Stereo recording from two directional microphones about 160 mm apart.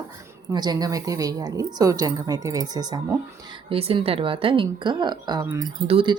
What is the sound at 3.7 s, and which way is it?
Speech, 35° right (ahead or behind).